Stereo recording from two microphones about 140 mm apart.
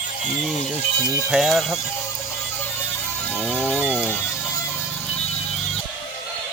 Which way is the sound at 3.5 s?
15° left (ahead or behind).